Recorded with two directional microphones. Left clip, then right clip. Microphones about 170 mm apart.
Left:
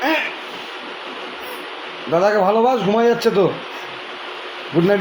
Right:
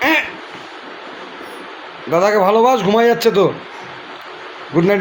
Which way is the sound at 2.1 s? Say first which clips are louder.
Right 3 dB; 25° right (ahead or behind).